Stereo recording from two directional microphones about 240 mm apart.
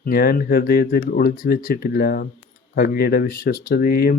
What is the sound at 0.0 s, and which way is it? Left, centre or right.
Speech, left.